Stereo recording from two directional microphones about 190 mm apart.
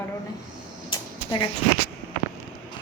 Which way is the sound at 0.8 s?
25° left (ahead or behind).